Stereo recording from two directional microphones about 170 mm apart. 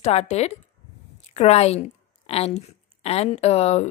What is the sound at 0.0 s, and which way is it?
A woman's voice, 40° left (ahead or behind).